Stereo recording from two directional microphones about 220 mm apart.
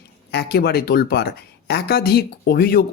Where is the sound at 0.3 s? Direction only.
45° left (ahead or behind).